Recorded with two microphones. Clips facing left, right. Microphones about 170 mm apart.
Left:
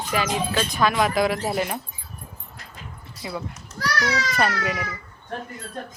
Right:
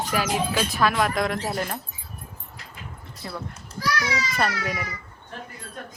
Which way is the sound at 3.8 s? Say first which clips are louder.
Left 1 dB; 70° left (ahead or behind).